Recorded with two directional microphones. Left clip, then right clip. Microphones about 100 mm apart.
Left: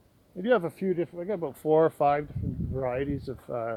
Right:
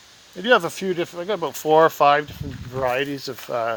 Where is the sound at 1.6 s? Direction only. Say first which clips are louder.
Right 8 dB; centre (ahead or behind).